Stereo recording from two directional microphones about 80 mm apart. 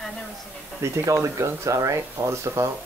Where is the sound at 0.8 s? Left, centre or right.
Right.